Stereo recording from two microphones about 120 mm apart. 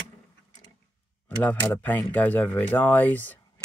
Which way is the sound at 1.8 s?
15° left (ahead or behind).